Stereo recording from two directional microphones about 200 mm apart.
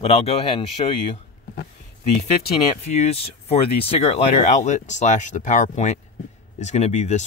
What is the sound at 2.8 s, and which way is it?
Speech, 30° left (ahead or behind).